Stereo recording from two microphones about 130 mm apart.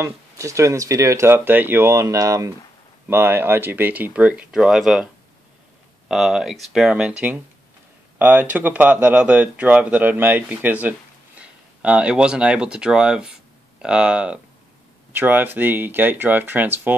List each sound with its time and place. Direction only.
0.0 s speech: 25° right (ahead or behind)